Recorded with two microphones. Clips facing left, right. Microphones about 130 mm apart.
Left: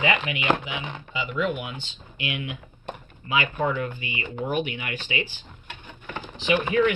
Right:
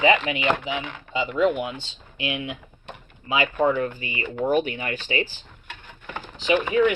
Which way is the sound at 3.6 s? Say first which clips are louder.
Right 4 dB; 35° right (ahead or behind).